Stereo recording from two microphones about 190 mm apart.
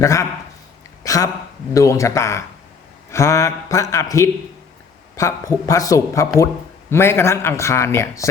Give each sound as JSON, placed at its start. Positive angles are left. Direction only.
{"t": 0.0, "sound": "speech", "side_deg": 15}